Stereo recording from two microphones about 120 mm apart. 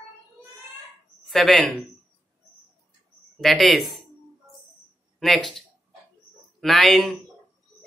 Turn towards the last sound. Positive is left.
turn(degrees=0)  # may be behind; listen again after turning